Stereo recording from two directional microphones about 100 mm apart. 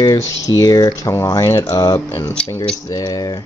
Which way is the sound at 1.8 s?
35° left (ahead or behind).